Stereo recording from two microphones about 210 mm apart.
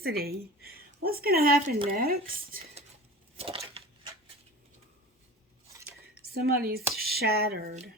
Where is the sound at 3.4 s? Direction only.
30° right (ahead or behind).